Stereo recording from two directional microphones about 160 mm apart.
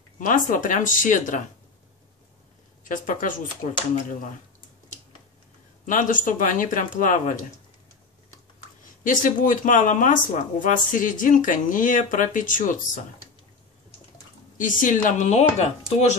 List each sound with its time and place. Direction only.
0.2 s speech: 55° left (ahead or behind)
2.8 s speech: 55° left (ahead or behind)
5.9 s speech: 55° left (ahead or behind)
8.8 s speech: 55° left (ahead or behind)
14.6 s speech: 55° left (ahead or behind)